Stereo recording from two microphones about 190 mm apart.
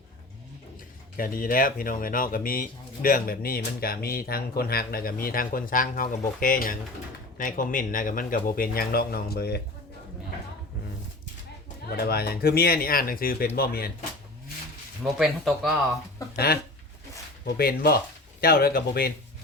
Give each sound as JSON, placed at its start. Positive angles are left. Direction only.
{"t": 1.1, "sound": "speech", "side_deg": 50}
{"t": 11.9, "sound": "speech", "side_deg": 55}
{"t": 15.0, "sound": "speech", "side_deg": 0}
{"t": 16.3, "sound": "speech", "side_deg": 55}